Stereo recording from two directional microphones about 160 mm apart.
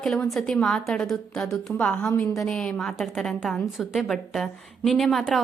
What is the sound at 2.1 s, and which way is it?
Speech, 20° left (ahead or behind).